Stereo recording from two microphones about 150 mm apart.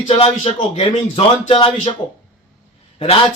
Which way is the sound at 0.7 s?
40° left (ahead or behind).